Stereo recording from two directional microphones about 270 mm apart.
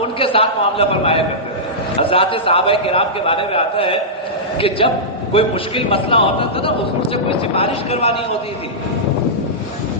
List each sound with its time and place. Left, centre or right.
0.0 s a man's voice: left